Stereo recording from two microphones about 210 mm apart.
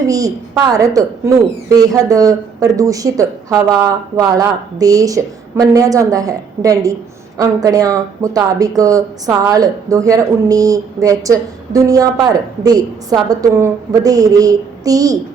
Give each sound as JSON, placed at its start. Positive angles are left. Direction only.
{"t": 0.1, "sound": "speech", "side_deg": -15}